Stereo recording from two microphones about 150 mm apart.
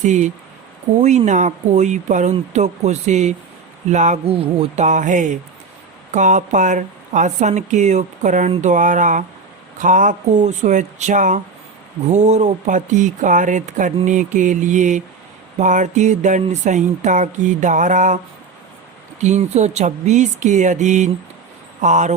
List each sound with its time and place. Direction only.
0.0 s speech: 55° right (ahead or behind)
19.2 s speech: 50° right (ahead or behind)